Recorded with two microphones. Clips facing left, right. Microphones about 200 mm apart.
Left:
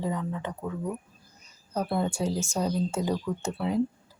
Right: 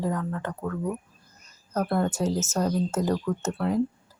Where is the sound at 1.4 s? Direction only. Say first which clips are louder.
Right 3 dB; 10° left (ahead or behind).